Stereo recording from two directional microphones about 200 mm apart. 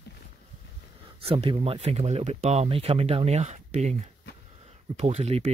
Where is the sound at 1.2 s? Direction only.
30° right (ahead or behind).